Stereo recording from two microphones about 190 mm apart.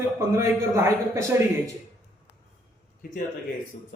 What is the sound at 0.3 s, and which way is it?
Speech, 15° right (ahead or behind).